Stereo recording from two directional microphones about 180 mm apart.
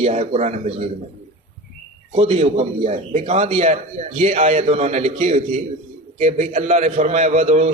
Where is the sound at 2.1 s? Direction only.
30° right (ahead or behind).